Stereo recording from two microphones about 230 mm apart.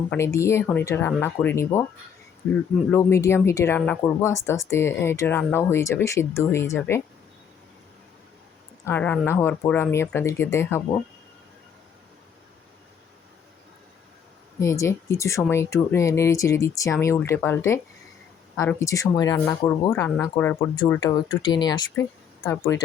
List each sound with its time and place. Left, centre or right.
0.1 s speech: centre
8.8 s speech: centre
14.6 s speech: centre